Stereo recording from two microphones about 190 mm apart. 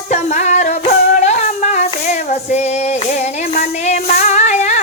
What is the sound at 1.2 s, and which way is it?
Music, 40° left (ahead or behind).